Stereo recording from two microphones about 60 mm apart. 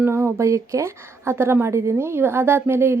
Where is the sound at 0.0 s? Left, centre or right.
Right.